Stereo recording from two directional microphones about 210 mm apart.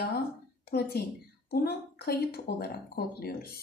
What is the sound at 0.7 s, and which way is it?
A woman's voice, 50° left (ahead or behind).